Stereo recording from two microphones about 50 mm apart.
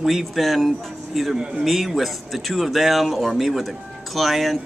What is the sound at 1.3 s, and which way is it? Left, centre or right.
Speech, centre.